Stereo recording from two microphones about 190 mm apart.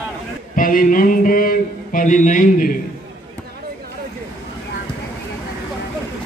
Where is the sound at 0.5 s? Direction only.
45° left (ahead or behind).